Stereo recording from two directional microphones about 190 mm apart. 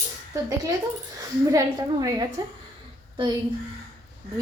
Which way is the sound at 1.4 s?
15° right (ahead or behind).